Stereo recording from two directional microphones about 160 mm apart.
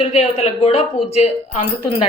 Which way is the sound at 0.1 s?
45° left (ahead or behind).